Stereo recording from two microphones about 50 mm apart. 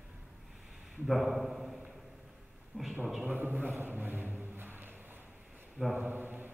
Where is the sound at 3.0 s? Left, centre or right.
Centre.